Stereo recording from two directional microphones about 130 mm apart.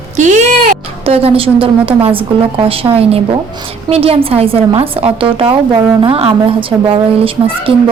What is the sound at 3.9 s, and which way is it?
A woman's voice, 50° right (ahead or behind).